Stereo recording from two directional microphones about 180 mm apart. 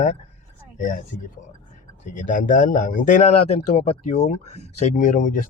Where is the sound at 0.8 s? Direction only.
50° left (ahead or behind).